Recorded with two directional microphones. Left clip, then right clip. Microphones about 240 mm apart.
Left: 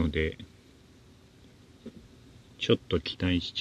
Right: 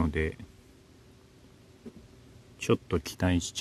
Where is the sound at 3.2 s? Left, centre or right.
Right.